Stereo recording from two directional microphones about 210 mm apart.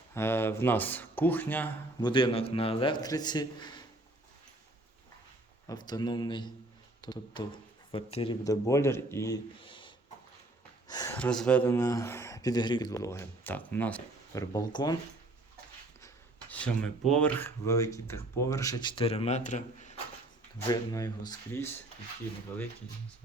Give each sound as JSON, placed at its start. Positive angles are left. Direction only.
{"t": 0.1, "sound": "speech", "side_deg": 10}
{"t": 2.0, "sound": "a man's voice", "side_deg": 20}
{"t": 5.6, "sound": "a man's voice", "side_deg": 20}
{"t": 11.2, "sound": "speech", "side_deg": 5}
{"t": 14.5, "sound": "a man's voice", "side_deg": 20}
{"t": 16.0, "sound": "speech", "side_deg": 5}
{"t": 20.7, "sound": "speech", "side_deg": 15}